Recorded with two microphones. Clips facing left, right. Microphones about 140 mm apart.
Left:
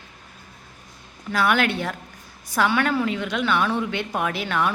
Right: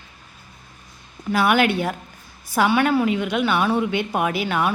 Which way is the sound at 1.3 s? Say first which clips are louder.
Right 3 dB; 10° right (ahead or behind).